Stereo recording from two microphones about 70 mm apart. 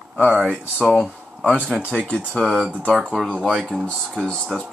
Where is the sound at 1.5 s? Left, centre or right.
Centre.